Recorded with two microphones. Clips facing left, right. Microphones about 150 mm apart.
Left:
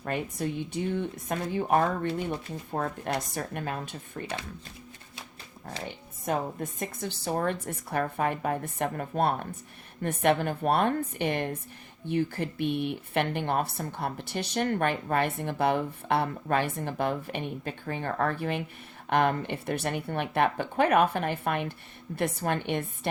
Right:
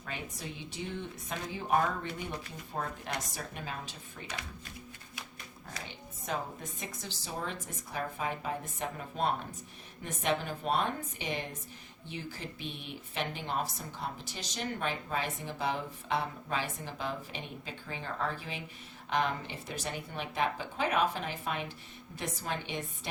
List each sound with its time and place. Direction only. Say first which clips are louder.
0.0 s a woman's voice: left 11 dB; 55° left (ahead or behind)
6.2 s a woman's voice: left 7 dB; 55° left (ahead or behind)